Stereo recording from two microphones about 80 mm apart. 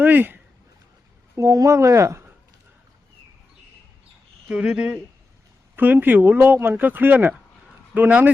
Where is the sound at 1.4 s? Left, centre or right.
Right.